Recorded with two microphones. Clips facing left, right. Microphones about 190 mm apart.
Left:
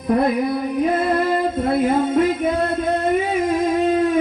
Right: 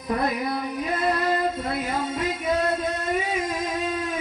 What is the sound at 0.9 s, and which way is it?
Music, 55° left (ahead or behind).